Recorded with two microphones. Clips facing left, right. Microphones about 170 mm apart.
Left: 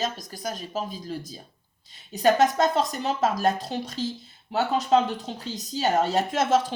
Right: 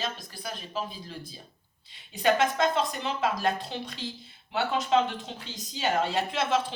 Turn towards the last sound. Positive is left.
turn(degrees=45)  # may be behind; listen again after turning